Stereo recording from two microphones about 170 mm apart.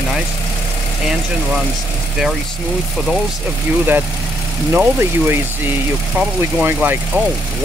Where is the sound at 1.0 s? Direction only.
Centre (ahead or behind).